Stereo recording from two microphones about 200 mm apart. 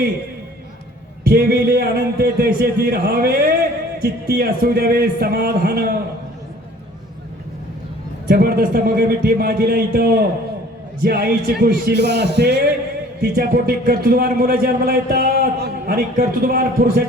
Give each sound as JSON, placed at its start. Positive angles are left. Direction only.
{"t": 1.2, "sound": "a man's voice", "side_deg": -50}
{"t": 8.3, "sound": "a man's voice", "side_deg": -50}